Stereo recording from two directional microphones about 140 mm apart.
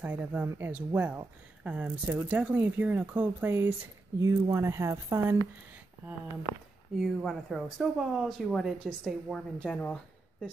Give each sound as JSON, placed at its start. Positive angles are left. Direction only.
{"t": 0.0, "sound": "a woman's voice", "side_deg": -10}
{"t": 7.0, "sound": "speech", "side_deg": 0}